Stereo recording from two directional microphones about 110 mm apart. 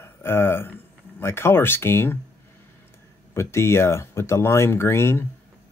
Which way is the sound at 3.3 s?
25° left (ahead or behind).